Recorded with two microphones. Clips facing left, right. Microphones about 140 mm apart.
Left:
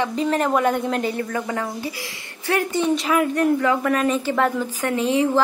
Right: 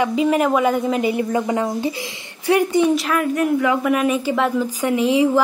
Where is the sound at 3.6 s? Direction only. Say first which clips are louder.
Right 2 dB; 10° right (ahead or behind).